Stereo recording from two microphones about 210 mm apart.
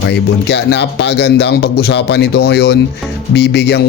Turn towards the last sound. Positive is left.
turn(degrees=55)  # may be behind; listen again after turning